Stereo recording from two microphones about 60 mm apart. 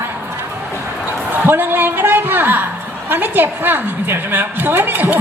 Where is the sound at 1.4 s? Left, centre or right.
Right.